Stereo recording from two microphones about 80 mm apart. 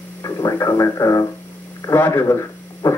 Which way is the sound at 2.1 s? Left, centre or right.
Left.